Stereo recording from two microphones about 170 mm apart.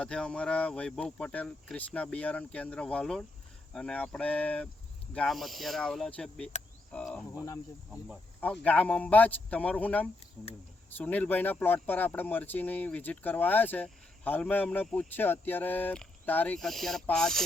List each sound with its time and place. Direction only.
0.0 s speech: 5° left (ahead or behind)
7.3 s speech: 20° left (ahead or behind)
8.6 s speech: 10° left (ahead or behind)